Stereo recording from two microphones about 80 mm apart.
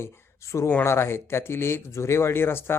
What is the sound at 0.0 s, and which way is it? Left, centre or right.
Speech, left.